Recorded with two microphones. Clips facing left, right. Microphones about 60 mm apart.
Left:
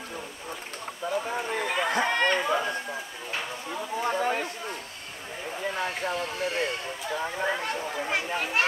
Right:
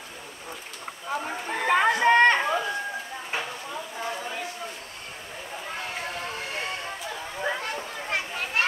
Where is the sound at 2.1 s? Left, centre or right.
Right.